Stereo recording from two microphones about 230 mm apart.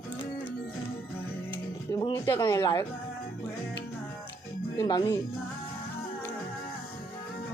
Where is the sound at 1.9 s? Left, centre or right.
Centre.